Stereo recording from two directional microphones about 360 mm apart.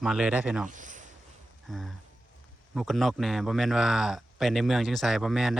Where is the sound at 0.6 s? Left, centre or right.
Right.